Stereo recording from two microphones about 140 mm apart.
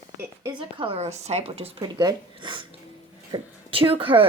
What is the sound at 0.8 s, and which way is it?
Speech, 45° right (ahead or behind).